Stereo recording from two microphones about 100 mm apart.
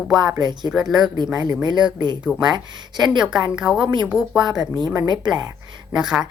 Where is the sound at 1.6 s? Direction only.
45° right (ahead or behind).